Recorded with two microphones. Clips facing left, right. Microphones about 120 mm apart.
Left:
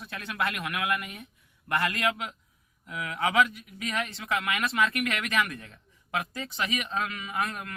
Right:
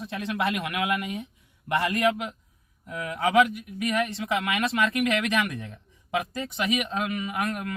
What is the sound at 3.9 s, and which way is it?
Speech, 20° right (ahead or behind).